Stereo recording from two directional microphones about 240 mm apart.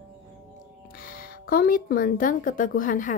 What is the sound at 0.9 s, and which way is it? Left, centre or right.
A woman's voice, left.